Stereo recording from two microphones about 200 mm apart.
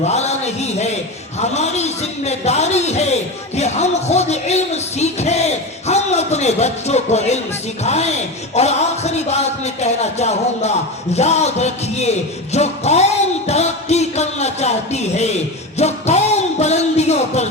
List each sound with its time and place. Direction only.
0.0 s a sound: 35° left (ahead or behind)
1.4 s a man's voice: 35° left (ahead or behind)
13.5 s music: 35° left (ahead or behind)